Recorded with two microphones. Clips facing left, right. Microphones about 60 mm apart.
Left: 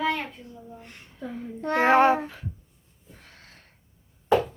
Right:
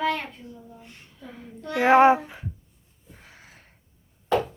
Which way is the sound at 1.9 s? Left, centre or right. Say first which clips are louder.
Right 4 dB; centre.